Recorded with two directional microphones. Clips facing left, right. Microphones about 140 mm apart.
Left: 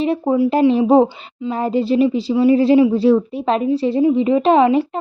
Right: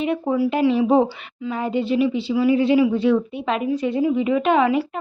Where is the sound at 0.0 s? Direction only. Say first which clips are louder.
Left 4 dB; 35° left (ahead or behind).